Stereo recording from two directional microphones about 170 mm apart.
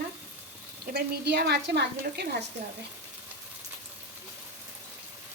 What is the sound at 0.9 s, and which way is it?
A woman's voice, 75° right (ahead or behind).